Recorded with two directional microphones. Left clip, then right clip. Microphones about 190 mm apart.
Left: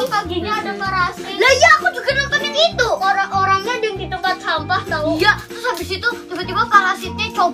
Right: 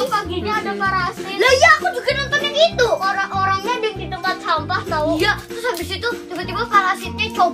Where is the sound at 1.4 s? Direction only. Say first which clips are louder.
Left 1 dB; 15° right (ahead or behind).